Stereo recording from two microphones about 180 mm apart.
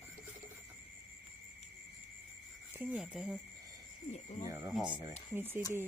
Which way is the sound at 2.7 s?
10° right (ahead or behind).